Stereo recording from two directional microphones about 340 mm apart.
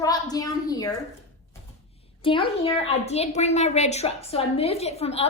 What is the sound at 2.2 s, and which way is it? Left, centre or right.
A woman's voice, centre.